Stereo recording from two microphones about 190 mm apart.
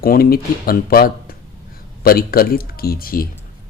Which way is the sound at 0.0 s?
50° left (ahead or behind).